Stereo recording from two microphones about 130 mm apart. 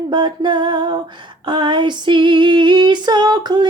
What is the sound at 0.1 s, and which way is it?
Female singing, 35° right (ahead or behind).